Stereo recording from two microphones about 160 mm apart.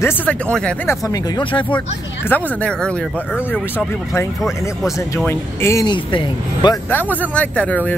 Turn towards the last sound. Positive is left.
turn(degrees=10)  # may be behind; listen again after turning